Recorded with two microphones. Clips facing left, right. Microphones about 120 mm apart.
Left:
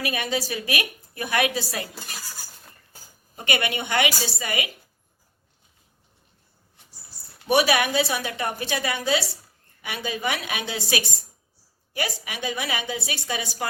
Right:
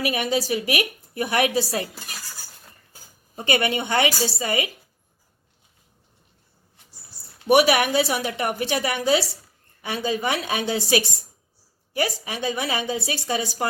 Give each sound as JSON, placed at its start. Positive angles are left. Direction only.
{"t": 0.0, "sound": "a woman's voice", "side_deg": -25}
{"t": 3.3, "sound": "a woman's voice", "side_deg": -30}
{"t": 7.4, "sound": "a woman's voice", "side_deg": -20}